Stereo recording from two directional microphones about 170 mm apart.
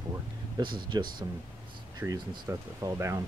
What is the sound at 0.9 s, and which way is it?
Speech, 25° right (ahead or behind).